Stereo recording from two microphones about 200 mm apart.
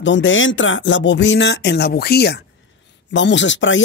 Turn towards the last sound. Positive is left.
turn(degrees=65)  # may be behind; listen again after turning